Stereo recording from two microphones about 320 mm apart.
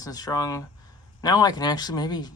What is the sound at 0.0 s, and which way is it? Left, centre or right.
Speech, centre.